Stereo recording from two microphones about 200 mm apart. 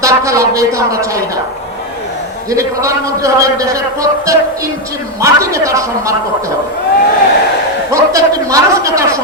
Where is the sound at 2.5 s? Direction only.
15° right (ahead or behind).